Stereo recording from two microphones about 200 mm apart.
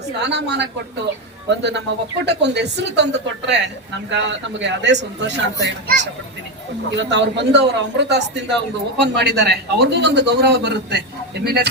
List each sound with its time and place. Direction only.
0.2 s a man's voice: 60° right (ahead or behind)